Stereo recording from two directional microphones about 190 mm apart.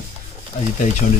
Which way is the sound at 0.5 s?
40° left (ahead or behind).